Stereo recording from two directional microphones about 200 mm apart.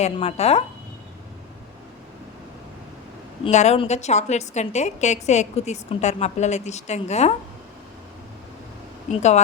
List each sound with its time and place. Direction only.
0.0 s a woman's voice: 30° left (ahead or behind)
3.4 s a woman's voice: 35° left (ahead or behind)
9.1 s a woman's voice: 35° left (ahead or behind)